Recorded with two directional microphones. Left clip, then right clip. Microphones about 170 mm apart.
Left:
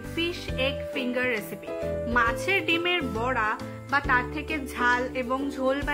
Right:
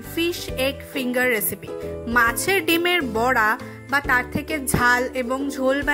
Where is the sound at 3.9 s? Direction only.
30° right (ahead or behind).